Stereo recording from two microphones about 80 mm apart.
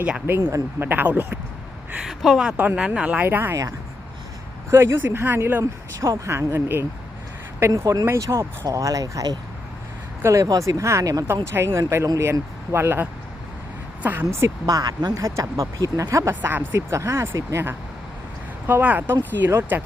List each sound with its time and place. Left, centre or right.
0.3 s speech: right
2.0 s speech: centre
2.6 s speech: right
3.2 s speech: right
3.5 s speech: right
4.7 s speech: right
6.0 s speech: right
7.7 s speech: right
8.0 s speech: right
11.5 s speech: right
14.7 s speech: right
16.3 s speech: right
16.9 s speech: right
18.7 s speech: right